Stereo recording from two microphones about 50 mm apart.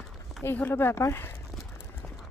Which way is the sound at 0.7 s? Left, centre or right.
Left.